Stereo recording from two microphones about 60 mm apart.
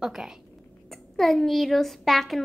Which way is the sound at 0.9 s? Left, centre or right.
Centre.